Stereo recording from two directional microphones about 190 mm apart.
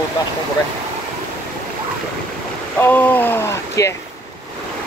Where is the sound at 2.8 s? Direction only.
10° left (ahead or behind).